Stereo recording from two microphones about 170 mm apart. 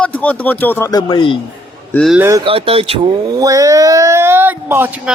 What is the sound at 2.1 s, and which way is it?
Speech, 15° right (ahead or behind).